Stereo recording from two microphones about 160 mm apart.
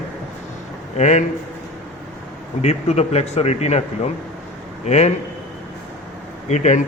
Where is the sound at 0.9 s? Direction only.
45° left (ahead or behind).